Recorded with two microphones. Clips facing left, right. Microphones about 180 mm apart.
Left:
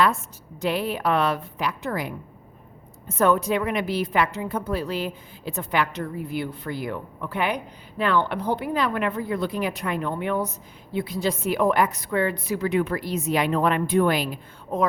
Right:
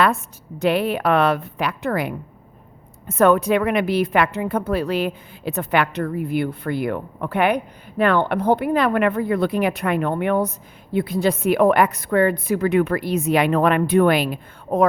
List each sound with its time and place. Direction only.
0.6 s a woman's voice: 65° right (ahead or behind)